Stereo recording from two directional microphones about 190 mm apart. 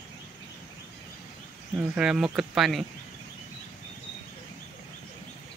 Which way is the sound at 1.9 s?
5° right (ahead or behind).